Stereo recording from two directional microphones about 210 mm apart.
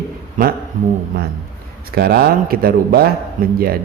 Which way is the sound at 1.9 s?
50° right (ahead or behind).